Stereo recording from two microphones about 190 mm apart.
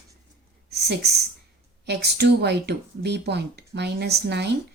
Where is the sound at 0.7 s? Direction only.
60° right (ahead or behind).